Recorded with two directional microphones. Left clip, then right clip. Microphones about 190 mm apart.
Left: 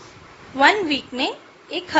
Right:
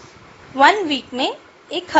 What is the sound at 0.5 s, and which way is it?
A woman's voice, 15° right (ahead or behind).